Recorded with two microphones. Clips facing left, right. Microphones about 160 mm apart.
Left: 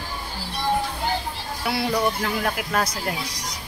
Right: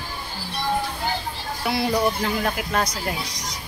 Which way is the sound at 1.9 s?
5° right (ahead or behind).